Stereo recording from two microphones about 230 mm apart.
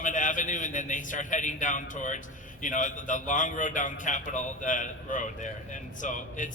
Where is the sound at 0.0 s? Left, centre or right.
Left.